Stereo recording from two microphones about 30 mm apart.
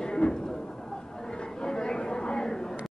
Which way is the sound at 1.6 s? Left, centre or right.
Left.